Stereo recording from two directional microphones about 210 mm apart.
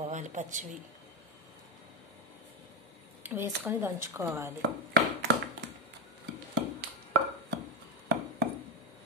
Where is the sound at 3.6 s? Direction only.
15° right (ahead or behind).